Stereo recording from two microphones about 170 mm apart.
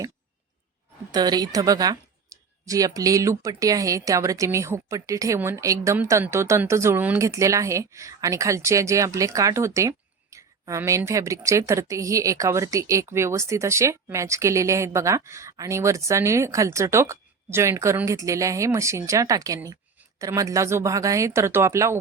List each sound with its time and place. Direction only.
1.1 s speech: 25° right (ahead or behind)